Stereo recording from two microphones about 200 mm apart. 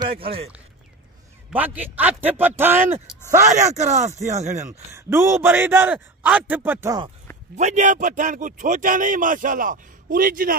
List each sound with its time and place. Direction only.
0.1 s speech: 30° right (ahead or behind)
1.5 s a man's voice: 10° right (ahead or behind)
3.4 s a man's voice: 35° right (ahead or behind)
4.9 s a man's voice: 15° right (ahead or behind)
7.5 s a man's voice: 35° right (ahead or behind)